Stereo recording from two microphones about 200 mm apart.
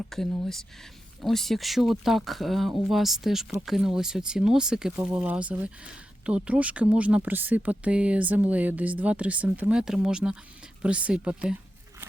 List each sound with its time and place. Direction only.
0.1 s speech: centre (ahead or behind)